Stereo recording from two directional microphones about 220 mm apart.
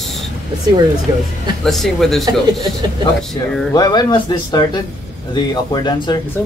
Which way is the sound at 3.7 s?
20° left (ahead or behind).